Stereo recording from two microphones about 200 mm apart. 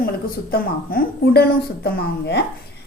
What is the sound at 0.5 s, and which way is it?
A woman's voice, 50° left (ahead or behind).